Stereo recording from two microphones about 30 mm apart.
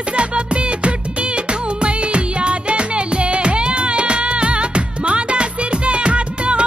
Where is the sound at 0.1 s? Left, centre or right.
Right.